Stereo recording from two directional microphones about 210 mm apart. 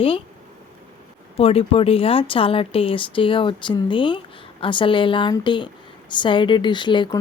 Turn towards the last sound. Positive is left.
turn(degrees=20)  # may be behind; listen again after turning